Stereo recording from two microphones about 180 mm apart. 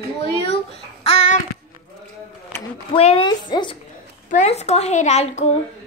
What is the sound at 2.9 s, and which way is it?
Speech, 30° left (ahead or behind).